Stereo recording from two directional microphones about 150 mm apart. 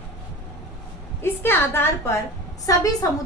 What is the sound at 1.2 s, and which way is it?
A woman's voice, 15° left (ahead or behind).